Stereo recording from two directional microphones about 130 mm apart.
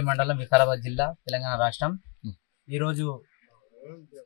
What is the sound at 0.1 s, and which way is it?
Speech, 25° right (ahead or behind).